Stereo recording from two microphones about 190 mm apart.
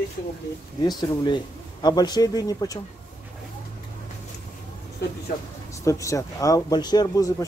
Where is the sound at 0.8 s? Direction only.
20° left (ahead or behind).